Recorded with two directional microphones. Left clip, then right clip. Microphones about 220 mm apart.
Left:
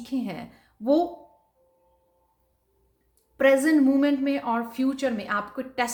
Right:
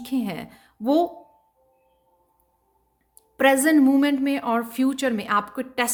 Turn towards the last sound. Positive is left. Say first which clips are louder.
# right 2 dB
turn(degrees=-45)  # may be behind; listen again after turning